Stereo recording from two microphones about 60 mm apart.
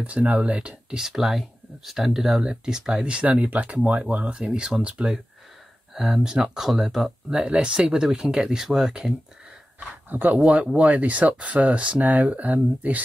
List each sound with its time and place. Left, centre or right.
0.0 s speech: right; by 9.1 s centre
10.0 s speech: right